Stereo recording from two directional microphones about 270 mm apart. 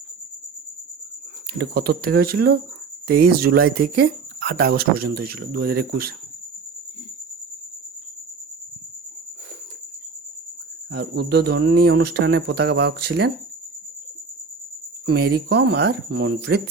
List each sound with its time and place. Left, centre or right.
1.5 s speech: right
10.9 s speech: right
15.0 s speech: right